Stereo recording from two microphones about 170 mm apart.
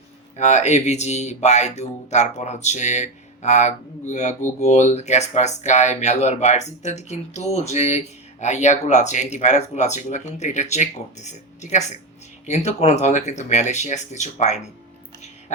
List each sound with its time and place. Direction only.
0.3 s speech: 40° left (ahead or behind)